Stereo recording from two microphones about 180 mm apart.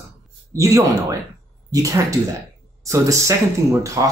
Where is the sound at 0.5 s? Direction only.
15° right (ahead or behind).